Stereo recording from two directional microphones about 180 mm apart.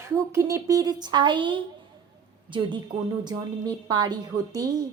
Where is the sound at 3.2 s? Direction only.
20° right (ahead or behind).